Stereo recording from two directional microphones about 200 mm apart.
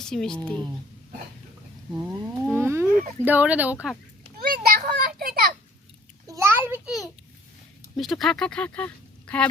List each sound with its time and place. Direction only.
0.0 s speech: 5° left (ahead or behind)
2.5 s speech: 10° right (ahead or behind)
2.9 s speech: 45° right (ahead or behind)
3.2 s speech: 10° right (ahead or behind)
4.4 s children playing: 50° right (ahead or behind)
6.2 s a sound: 15° right (ahead or behind)
7.9 s speech: centre (ahead or behind)